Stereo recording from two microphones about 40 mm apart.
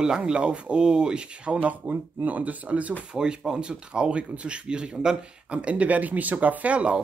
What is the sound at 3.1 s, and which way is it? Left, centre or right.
Speech, right.